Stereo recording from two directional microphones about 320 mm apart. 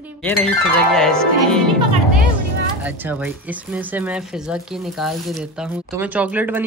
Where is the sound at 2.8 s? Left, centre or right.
Centre.